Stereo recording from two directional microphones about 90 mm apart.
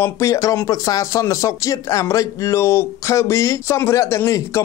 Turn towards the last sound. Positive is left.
turn(degrees=30)  # may be behind; listen again after turning